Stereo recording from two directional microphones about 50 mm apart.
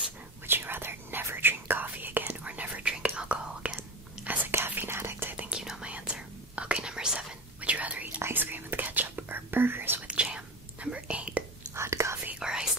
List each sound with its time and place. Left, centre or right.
0.5 s whispering: right
2.2 s whispering: right
4.6 s whispering: right
5.5 s whispering: centre
5.9 s whispering: right
7.6 s whispering: right
8.2 s whispering: right
10.0 s whispering: centre
11.7 s whispering: right
12.4 s whispering: centre